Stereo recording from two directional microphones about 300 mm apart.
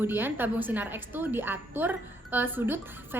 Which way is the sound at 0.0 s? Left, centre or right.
Centre.